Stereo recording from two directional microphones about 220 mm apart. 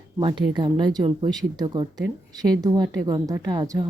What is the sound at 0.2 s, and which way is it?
Speech, 20° right (ahead or behind).